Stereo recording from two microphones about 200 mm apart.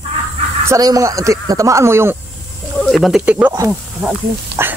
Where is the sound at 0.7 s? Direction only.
15° right (ahead or behind).